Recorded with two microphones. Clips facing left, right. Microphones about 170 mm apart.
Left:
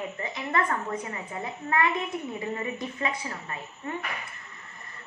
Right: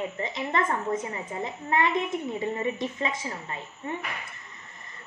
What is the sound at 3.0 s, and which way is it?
Speech, 20° right (ahead or behind).